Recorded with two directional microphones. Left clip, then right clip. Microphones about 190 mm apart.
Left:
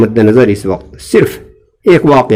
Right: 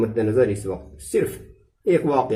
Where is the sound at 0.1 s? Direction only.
50° left (ahead or behind).